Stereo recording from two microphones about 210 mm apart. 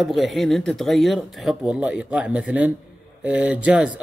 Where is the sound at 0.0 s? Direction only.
Centre (ahead or behind).